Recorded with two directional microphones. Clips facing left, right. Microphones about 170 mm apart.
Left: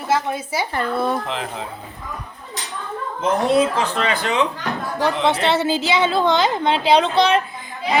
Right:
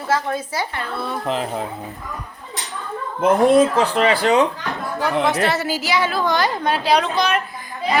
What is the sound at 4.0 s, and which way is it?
Speech, 35° right (ahead or behind).